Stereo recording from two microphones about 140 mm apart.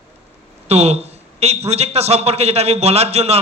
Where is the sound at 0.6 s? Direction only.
50° right (ahead or behind).